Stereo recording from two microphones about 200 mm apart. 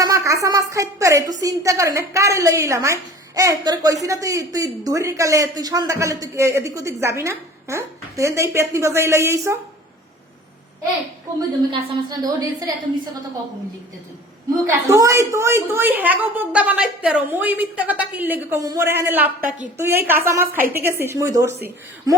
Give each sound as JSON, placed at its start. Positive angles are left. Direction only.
{"t": 0.0, "sound": "a woman's voice", "side_deg": -15}
{"t": 11.3, "sound": "a woman's voice", "side_deg": -25}
{"t": 14.8, "sound": "a woman's voice", "side_deg": -15}